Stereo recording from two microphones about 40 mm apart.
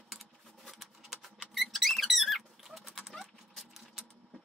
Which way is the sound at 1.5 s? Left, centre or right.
Centre.